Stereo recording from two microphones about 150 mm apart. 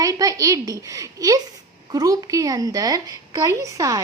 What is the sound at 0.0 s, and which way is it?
A woman's voice, 25° right (ahead or behind).